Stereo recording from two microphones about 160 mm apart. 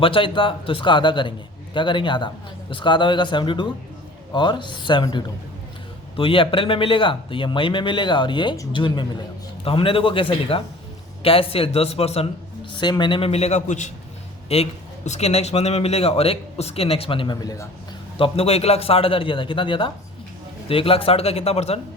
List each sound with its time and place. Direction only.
0.0 s a man's voice: 35° left (ahead or behind)
12.7 s a man's voice: 30° left (ahead or behind)
18.2 s a man's voice: 40° left (ahead or behind)